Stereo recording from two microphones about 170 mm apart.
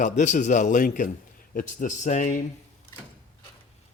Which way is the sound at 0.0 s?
45° left (ahead or behind).